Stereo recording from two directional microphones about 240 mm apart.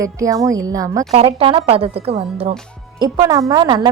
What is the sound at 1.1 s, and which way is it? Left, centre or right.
A woman's voice, right.